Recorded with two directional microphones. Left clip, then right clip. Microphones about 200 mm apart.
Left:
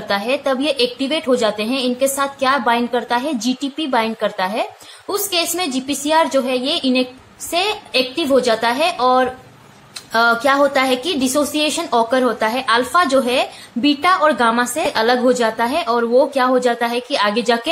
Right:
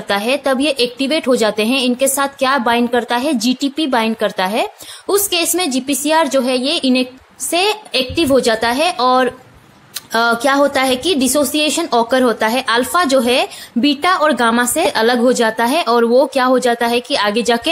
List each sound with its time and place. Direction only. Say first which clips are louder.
0.1 s a woman's voice: right 3 dB; 40° right (ahead or behind)